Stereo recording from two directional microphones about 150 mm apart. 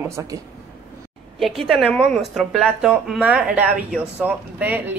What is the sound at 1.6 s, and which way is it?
Speech, centre (ahead or behind).